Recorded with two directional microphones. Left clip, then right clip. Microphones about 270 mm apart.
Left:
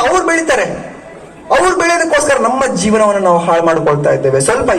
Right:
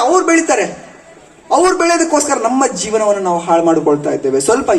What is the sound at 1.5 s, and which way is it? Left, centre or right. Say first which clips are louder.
A man's voice: left 1 dB; right.